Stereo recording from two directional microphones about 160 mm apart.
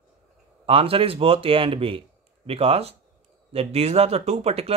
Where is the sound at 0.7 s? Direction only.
35° right (ahead or behind).